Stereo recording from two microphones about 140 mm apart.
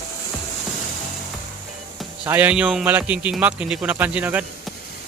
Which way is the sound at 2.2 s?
15° right (ahead or behind).